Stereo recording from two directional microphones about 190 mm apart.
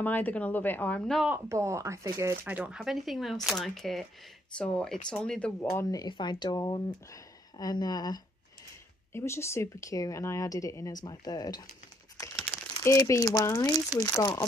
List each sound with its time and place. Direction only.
0.0 s speech: 10° left (ahead or behind)
1.3 s speech: 15° right (ahead or behind); by 11.6 s 20° left (ahead or behind)
12.2 s speech: 10° left (ahead or behind)